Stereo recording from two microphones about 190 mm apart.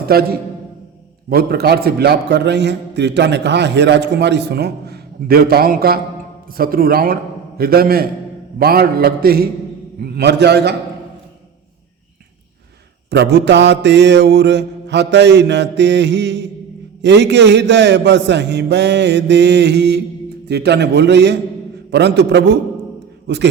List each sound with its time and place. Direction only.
0.1 s a man's voice: 55° right (ahead or behind)
13.1 s a man's voice: 60° right (ahead or behind)